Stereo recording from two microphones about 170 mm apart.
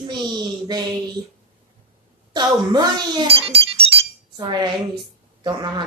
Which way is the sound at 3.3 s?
35° right (ahead or behind).